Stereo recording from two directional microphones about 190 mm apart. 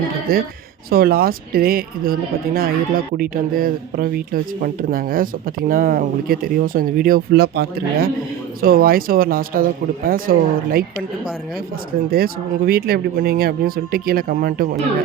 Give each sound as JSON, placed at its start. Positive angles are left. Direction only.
{"t": 0.3, "sound": "speech", "side_deg": -50}
{"t": 12.1, "sound": "speech", "side_deg": -50}